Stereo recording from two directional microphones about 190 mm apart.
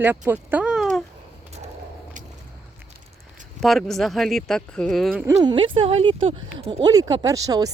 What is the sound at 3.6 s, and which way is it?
Speech, centre (ahead or behind).